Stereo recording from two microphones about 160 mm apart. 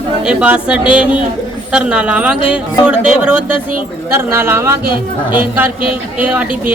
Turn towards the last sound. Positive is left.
turn(degrees=-10)  # may be behind; listen again after turning